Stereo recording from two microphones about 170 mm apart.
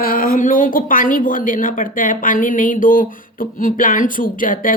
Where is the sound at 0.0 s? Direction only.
55° left (ahead or behind).